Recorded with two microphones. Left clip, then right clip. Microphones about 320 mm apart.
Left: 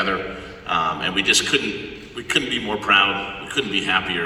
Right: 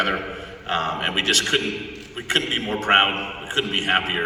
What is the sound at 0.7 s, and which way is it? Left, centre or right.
Speech, right.